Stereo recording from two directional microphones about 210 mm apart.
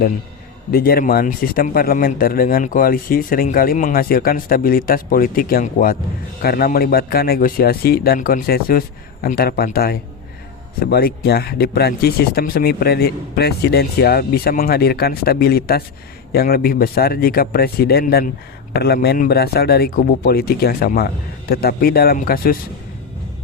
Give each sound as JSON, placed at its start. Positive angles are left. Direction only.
{"t": 0.7, "sound": "speech", "side_deg": 45}